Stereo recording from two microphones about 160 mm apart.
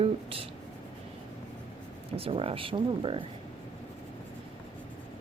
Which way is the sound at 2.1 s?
35° right (ahead or behind).